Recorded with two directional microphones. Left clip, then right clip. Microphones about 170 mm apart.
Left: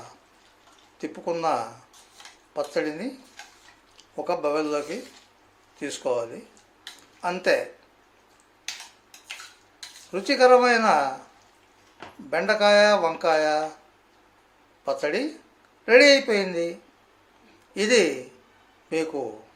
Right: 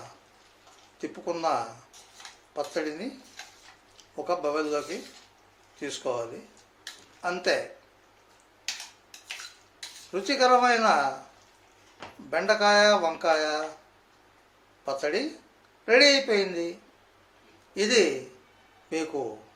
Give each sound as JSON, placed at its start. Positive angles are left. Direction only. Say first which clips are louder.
{"t": 0.9, "sound": "speech", "louder": "left 4 dB", "side_deg": 20}
{"t": 5.8, "sound": "speech", "louder": "left 4 dB", "side_deg": 20}
{"t": 10.1, "sound": "speech", "louder": "left 5 dB", "side_deg": 20}
{"t": 12.3, "sound": "speech", "louder": "left 3 dB", "side_deg": 20}
{"t": 14.8, "sound": "speech", "louder": "left 3 dB", "side_deg": 20}
{"t": 17.7, "sound": "speech", "louder": "left 2 dB", "side_deg": 20}